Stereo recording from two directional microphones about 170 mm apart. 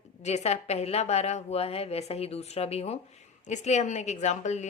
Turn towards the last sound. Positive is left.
turn(degrees=45)  # may be behind; listen again after turning